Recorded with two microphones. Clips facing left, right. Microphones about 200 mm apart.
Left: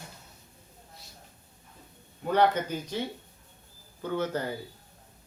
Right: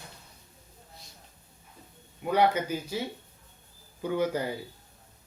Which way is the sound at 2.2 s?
10° right (ahead or behind).